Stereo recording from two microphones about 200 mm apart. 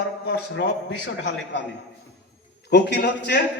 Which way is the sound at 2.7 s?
55° left (ahead or behind).